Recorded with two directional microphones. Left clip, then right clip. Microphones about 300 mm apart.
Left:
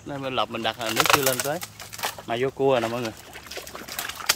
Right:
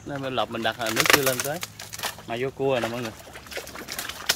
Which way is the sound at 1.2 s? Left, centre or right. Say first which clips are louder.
Left 1 dB; centre.